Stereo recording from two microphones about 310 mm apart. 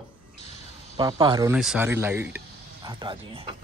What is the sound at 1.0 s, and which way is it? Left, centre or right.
Speech, centre.